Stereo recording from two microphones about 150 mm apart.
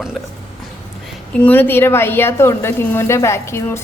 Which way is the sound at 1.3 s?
10° left (ahead or behind).